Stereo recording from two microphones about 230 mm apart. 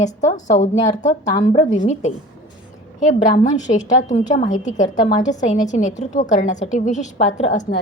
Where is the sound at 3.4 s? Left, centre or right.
Left.